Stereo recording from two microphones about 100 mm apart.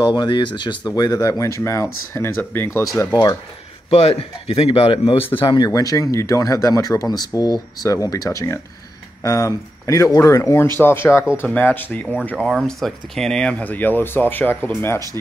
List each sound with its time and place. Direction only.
0.0 s speech: 50° left (ahead or behind); by 2.8 s 25° left (ahead or behind)
3.1 s speech: 45° left (ahead or behind)
3.9 s speech: 90° left; by 5.2 s 65° left (ahead or behind)
5.3 s speech: 55° left (ahead or behind)
5.7 s speech: 35° left (ahead or behind); by 12.3 s 10° left (ahead or behind)
12.4 s speech: 5° right (ahead or behind); by 15.0 s 20° left (ahead or behind)